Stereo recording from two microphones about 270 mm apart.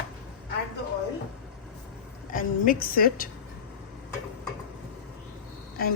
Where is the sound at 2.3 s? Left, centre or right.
Left.